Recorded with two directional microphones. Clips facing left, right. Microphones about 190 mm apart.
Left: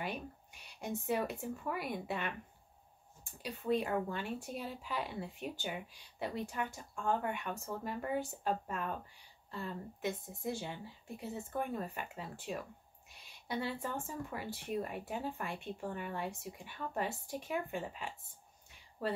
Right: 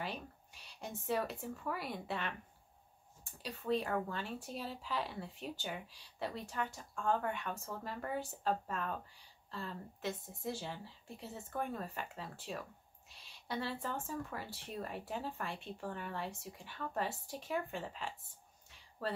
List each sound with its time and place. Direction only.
0.7 s speech: 10° left (ahead or behind)
3.4 s speech: 10° left (ahead or behind)